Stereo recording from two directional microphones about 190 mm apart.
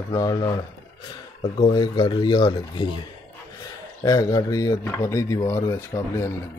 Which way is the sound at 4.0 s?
20° left (ahead or behind).